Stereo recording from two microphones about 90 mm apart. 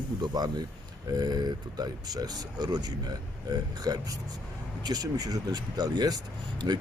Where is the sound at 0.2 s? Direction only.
50° right (ahead or behind).